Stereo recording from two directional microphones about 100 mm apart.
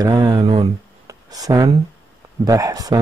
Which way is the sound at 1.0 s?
40° right (ahead or behind).